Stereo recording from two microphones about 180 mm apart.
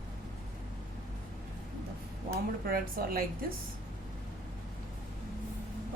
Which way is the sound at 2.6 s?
55° right (ahead or behind).